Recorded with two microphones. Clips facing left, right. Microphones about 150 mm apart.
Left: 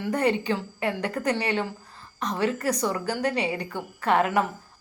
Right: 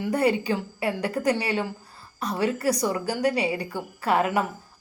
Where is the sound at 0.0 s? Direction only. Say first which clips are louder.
Right 1 dB; 10° right (ahead or behind).